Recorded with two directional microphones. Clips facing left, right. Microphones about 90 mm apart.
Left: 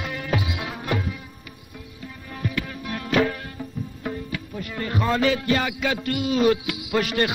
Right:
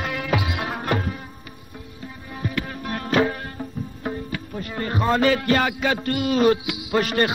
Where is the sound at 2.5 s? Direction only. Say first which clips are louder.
Right 4 dB; 40° right (ahead or behind).